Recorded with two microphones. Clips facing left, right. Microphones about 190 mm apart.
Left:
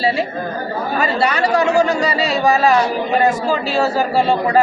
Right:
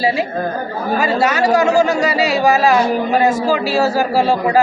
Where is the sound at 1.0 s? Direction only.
10° right (ahead or behind).